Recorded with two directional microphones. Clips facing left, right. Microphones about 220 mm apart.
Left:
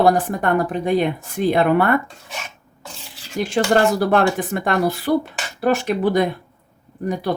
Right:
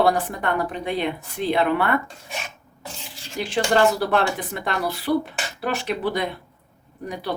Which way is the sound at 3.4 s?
45° left (ahead or behind).